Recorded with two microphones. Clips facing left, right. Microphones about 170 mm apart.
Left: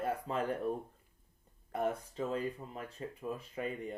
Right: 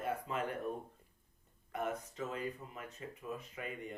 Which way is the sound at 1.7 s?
30° left (ahead or behind).